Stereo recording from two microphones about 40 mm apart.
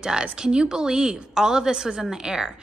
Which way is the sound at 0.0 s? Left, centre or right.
Centre.